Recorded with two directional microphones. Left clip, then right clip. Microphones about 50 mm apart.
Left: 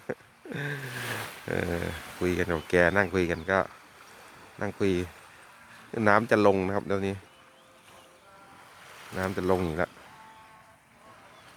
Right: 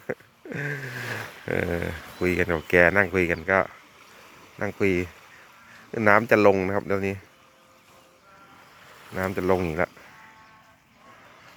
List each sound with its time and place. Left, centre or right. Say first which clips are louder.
0.1 s a sound: right 3 dB; centre
1.5 s speech: right 4 dB; centre
4.2 s stream: right 4 dB; centre
6.1 s speech: right 4 dB; centre
6.5 s speech: right 4 dB; centre
6.7 s speech: right 3 dB; centre
9.0 s speech: right 3 dB; right